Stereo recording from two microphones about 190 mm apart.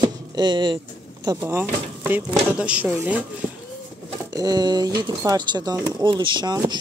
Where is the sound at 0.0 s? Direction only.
25° right (ahead or behind).